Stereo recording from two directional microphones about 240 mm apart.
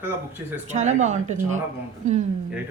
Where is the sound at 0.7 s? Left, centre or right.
Right.